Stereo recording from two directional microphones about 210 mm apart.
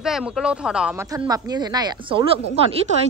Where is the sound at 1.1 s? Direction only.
15° right (ahead or behind).